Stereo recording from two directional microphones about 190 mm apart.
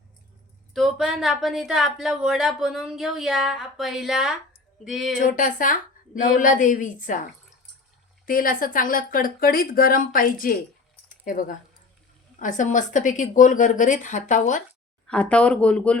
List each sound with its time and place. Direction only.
0.7 s speech: centre (ahead or behind)
5.1 s speech: 45° left (ahead or behind)
8.3 s a woman's voice: 50° left (ahead or behind)
15.0 s speech: 5° left (ahead or behind)